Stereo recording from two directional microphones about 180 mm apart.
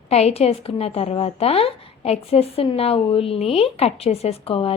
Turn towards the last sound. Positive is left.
turn(degrees=30)  # may be behind; listen again after turning